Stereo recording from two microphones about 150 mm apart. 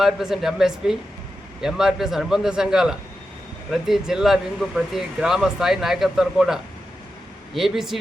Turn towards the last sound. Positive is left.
turn(degrees=0)  # may be behind; listen again after turning